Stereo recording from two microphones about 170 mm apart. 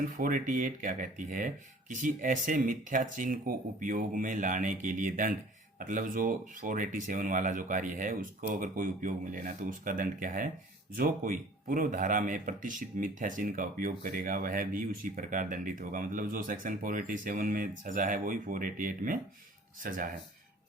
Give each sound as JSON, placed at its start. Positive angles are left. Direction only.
{"t": 0.2, "sound": "speech", "side_deg": -55}